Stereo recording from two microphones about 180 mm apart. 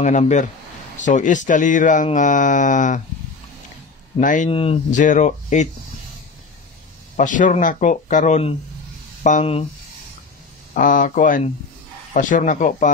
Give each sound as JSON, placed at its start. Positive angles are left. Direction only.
{"t": 0.0, "sound": "speech", "side_deg": 40}
{"t": 4.2, "sound": "speech", "side_deg": 45}
{"t": 4.5, "sound": "speech", "side_deg": 30}
{"t": 4.9, "sound": "speech", "side_deg": 45}
{"t": 7.2, "sound": "speech", "side_deg": 45}
{"t": 10.7, "sound": "speech", "side_deg": 45}